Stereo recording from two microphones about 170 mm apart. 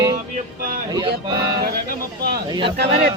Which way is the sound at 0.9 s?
25° right (ahead or behind).